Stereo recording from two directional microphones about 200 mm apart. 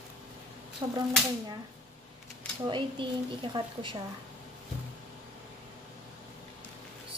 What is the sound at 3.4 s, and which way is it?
Speech, 25° right (ahead or behind).